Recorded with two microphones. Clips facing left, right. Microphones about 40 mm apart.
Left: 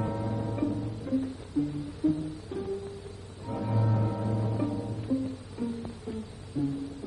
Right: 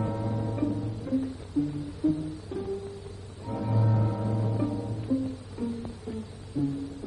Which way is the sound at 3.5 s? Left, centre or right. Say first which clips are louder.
Right 1 dB; centre.